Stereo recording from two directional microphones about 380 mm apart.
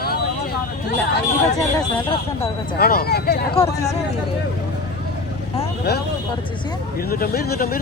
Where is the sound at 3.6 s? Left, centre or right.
Centre.